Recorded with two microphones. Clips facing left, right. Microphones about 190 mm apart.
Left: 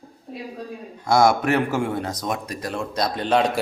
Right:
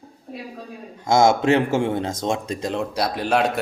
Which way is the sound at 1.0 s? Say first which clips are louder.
Right 1 dB; 25° right (ahead or behind).